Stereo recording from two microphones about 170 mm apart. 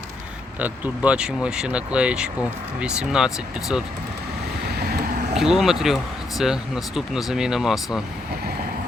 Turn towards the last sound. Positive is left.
turn(degrees=0)  # may be behind; listen again after turning